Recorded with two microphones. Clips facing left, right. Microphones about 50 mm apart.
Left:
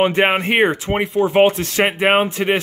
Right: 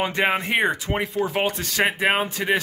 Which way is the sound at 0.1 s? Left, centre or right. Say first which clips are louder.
Left 5 dB; left.